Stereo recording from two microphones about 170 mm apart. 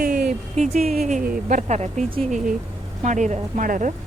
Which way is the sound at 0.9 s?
55° right (ahead or behind).